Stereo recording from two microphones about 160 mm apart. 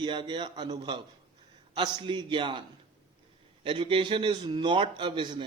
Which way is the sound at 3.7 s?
30° right (ahead or behind).